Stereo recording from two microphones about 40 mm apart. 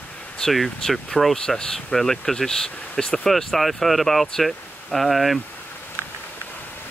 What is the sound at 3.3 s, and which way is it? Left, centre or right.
Speech, centre.